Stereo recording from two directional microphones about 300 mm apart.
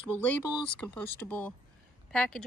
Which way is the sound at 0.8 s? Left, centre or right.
Centre.